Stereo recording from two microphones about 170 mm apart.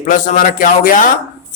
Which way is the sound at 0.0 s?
50° left (ahead or behind).